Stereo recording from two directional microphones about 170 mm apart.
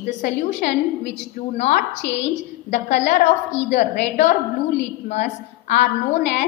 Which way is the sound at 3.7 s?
45° left (ahead or behind).